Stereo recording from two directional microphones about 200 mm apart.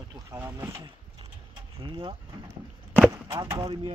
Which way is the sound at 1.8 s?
25° right (ahead or behind).